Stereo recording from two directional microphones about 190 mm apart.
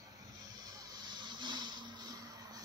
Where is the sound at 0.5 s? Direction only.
20° right (ahead or behind).